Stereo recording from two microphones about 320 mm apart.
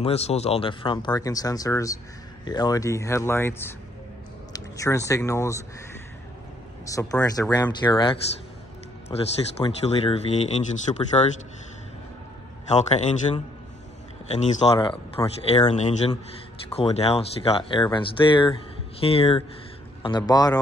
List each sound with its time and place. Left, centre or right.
0.0 s speech: centre
6.9 s a man's voice: centre
12.6 s a man's voice: left
14.4 s speech: centre